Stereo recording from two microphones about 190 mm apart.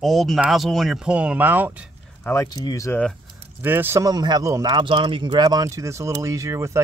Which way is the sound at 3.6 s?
10° right (ahead or behind).